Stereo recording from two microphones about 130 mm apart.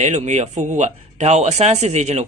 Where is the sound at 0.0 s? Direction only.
60° right (ahead or behind).